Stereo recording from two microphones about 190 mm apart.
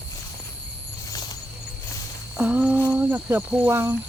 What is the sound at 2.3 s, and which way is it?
Humming, 5° right (ahead or behind).